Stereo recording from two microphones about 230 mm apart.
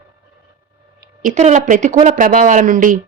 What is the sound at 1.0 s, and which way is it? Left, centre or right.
Speech, right.